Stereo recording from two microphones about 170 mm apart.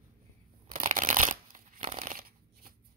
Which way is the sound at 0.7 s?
50° right (ahead or behind).